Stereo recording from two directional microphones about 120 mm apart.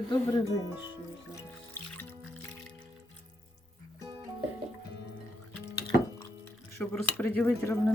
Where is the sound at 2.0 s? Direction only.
15° left (ahead or behind).